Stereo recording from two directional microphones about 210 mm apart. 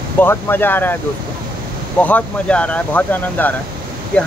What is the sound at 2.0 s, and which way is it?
Speech, 5° left (ahead or behind).